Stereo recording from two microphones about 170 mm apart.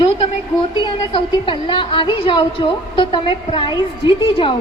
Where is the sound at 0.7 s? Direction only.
30° left (ahead or behind).